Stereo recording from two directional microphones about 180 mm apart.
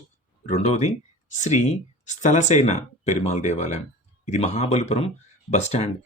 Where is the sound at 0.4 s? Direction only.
35° left (ahead or behind).